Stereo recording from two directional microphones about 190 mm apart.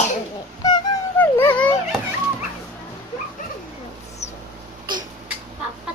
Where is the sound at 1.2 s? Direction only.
10° left (ahead or behind).